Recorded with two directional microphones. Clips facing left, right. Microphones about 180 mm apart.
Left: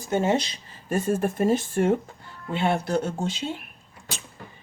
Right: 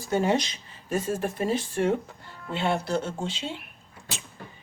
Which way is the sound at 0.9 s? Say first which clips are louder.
Left 4 dB; 55° left (ahead or behind).